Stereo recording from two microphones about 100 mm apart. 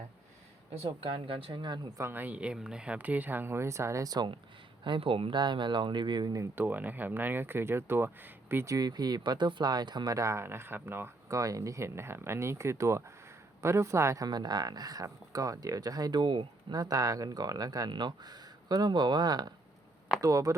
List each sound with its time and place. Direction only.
0.8 s speech: 60° right (ahead or behind)
2.0 s speech: 20° right (ahead or behind); by 4.3 s 40° right (ahead or behind)
4.8 s speech: 55° right (ahead or behind); by 6.5 s 40° right (ahead or behind)
6.6 s speech: 20° right (ahead or behind)
8.7 s speech: 40° right (ahead or behind)
10.2 s speech: 30° right (ahead or behind)
14.3 s speech: 45° right (ahead or behind)